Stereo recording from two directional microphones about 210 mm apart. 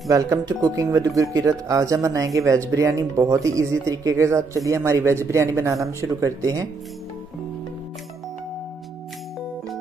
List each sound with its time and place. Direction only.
0.1 s speech: 15° right (ahead or behind)